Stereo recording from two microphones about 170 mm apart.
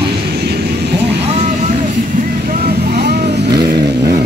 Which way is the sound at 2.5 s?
70° right (ahead or behind).